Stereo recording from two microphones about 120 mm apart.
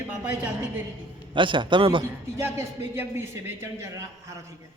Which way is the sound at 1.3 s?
45° right (ahead or behind).